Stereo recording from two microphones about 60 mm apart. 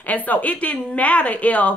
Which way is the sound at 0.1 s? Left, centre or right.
Left.